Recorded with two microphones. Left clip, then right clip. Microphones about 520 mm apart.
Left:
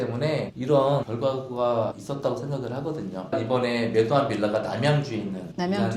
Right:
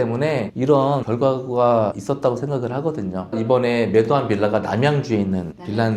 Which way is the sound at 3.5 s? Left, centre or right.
Right.